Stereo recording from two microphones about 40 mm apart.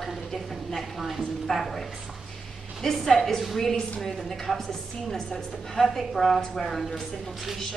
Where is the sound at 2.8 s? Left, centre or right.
Centre.